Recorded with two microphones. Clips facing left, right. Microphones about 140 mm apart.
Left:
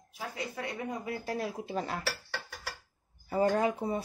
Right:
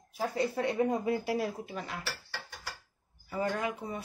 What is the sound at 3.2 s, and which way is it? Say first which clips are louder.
Speech: left 5 dB; 35° left (ahead or behind).